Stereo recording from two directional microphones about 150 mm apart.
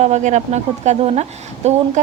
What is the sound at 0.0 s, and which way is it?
A woman's voice, 50° right (ahead or behind).